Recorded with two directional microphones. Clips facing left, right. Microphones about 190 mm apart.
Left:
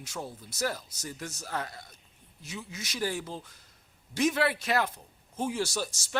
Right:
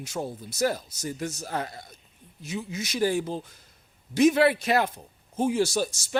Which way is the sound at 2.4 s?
15° right (ahead or behind).